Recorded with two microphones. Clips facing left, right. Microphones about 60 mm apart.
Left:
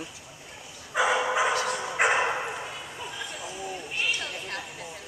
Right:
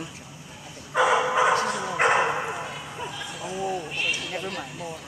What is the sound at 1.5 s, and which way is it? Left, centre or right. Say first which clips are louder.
Dog: right 4 dB; right.